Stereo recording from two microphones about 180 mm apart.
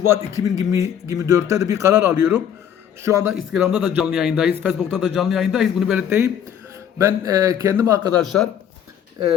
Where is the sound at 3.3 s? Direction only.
Centre (ahead or behind); by 8.0 s 15° right (ahead or behind).